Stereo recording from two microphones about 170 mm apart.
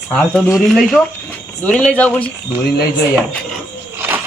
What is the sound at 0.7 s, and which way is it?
Speech, 5° left (ahead or behind).